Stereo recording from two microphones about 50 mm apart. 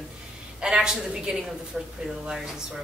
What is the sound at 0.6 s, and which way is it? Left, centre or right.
A woman's voice, centre.